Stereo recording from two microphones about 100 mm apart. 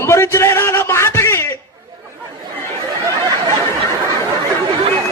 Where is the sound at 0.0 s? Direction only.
25° left (ahead or behind).